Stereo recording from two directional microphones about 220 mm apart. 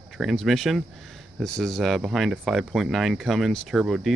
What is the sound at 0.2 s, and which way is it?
Speech, centre (ahead or behind).